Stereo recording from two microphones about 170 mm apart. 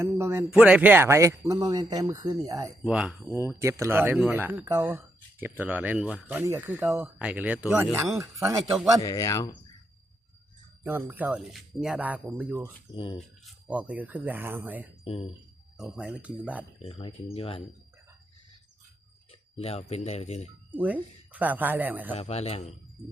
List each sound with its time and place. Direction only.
0.0 s speech: 15° right (ahead or behind)
2.8 s speech: 5° right (ahead or behind)
7.9 s speech: 20° right (ahead or behind)
9.0 s speech: 20° left (ahead or behind)
10.8 s speech: 10° right (ahead or behind)
15.0 s speech: 35° left (ahead or behind)
15.8 s speech: 5° right (ahead or behind)
16.8 s a man's voice: 35° left (ahead or behind)
19.3 s speech: 35° left (ahead or behind)
20.7 s speech: 10° right (ahead or behind)
22.1 s a man's voice: 35° left (ahead or behind)